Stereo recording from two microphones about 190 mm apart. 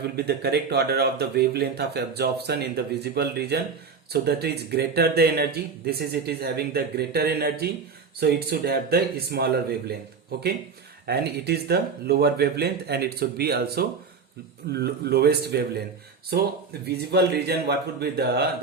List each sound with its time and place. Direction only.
0.0 s speech: 60° right (ahead or behind)